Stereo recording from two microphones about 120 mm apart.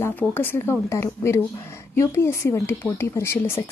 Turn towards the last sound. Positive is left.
turn(degrees=20)  # may be behind; listen again after turning